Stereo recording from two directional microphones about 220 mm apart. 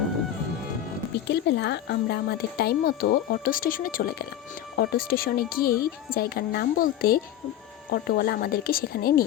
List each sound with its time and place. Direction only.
1.1 s speech: 50° left (ahead or behind)